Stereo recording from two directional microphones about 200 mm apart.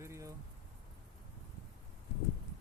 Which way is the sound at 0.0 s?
15° right (ahead or behind).